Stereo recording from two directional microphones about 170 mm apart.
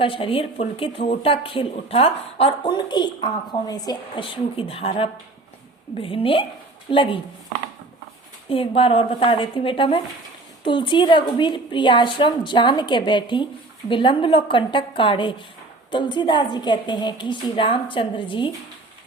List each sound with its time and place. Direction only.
0.0 s a woman's voice: 30° left (ahead or behind)
8.4 s a woman's voice: 30° left (ahead or behind)